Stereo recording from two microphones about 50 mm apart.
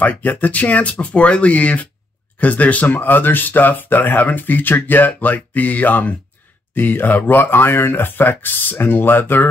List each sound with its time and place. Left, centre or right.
0.0 s speech: left